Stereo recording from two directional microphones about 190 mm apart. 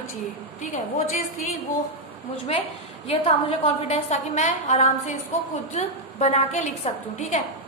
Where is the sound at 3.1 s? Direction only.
30° left (ahead or behind).